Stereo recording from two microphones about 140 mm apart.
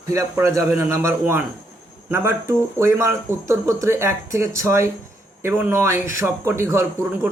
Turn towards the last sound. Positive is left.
turn(degrees=-20)  # may be behind; listen again after turning